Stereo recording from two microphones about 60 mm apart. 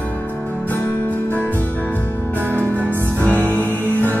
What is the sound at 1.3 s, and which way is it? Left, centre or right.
Music, left.